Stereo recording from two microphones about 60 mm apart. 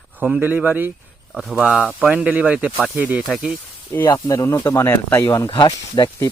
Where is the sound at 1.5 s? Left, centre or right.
Right.